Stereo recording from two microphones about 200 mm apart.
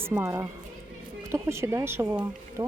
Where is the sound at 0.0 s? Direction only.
10° right (ahead or behind).